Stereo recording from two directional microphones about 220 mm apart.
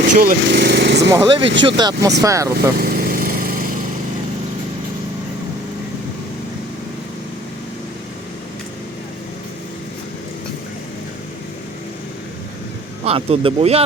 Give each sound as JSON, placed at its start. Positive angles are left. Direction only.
{"t": 0.2, "sound": "speech", "side_deg": -45}
{"t": 1.1, "sound": "speech", "side_deg": -20}
{"t": 2.7, "sound": "lawn mower", "side_deg": -40}
{"t": 13.1, "sound": "speech", "side_deg": -25}